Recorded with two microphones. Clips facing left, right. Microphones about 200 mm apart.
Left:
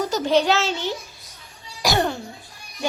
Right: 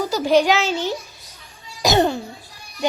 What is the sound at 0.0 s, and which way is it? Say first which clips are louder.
Speech: right 3 dB; 10° right (ahead or behind).